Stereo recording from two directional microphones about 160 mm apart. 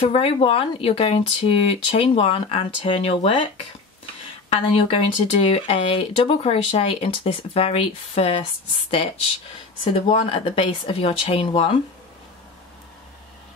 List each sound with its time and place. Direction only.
0.0 s speech: 40° left (ahead or behind)
4.5 s speech: 35° left (ahead or behind)
9.9 s speech: 35° left (ahead or behind)